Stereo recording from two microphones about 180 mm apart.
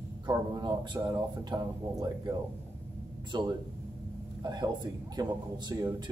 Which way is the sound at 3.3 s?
25° right (ahead or behind).